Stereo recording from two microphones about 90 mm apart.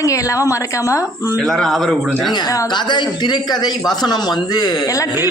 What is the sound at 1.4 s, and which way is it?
Speech, centre (ahead or behind).